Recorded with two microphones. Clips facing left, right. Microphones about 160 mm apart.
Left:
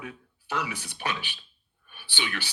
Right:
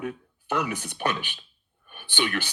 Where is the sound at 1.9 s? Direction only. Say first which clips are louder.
Right 6 dB; 50° right (ahead or behind).